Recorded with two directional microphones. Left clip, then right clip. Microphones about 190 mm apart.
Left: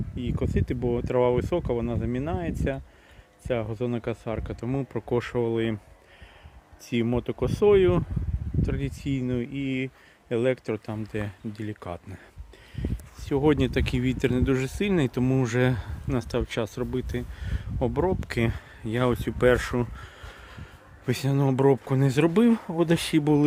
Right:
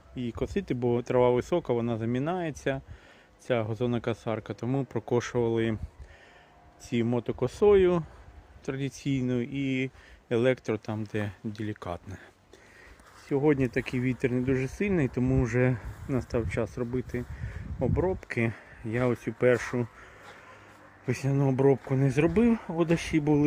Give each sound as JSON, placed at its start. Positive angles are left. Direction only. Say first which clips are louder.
{"t": 0.2, "sound": "speech", "louder": "left 1 dB", "side_deg": 0}
{"t": 6.8, "sound": "speech", "louder": "left 2 dB", "side_deg": 10}
{"t": 13.2, "sound": "speech", "louder": "left 2 dB", "side_deg": 25}
{"t": 15.1, "sound": "speech", "louder": "left 2 dB", "side_deg": 15}
{"t": 21.1, "sound": "speech", "louder": "left 3 dB", "side_deg": 15}
{"t": 21.3, "sound": "speech", "louder": "left 2 dB", "side_deg": 25}